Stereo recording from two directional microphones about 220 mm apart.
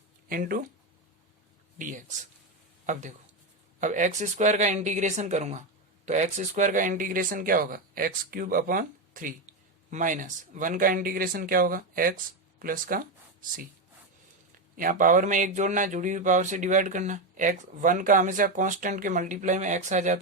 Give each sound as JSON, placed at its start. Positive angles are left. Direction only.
{"t": 0.3, "sound": "speech", "side_deg": -40}
{"t": 1.8, "sound": "speech", "side_deg": -35}
{"t": 14.8, "sound": "speech", "side_deg": -35}